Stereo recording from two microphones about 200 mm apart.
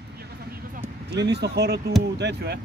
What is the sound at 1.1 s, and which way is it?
Speech, 55° right (ahead or behind).